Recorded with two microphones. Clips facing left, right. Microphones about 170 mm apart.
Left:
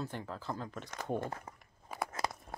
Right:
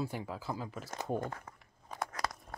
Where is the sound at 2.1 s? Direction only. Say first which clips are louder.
Left 1 dB; 25° left (ahead or behind).